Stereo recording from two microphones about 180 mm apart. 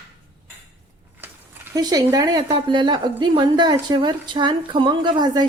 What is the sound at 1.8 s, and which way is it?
A woman's voice, 20° right (ahead or behind).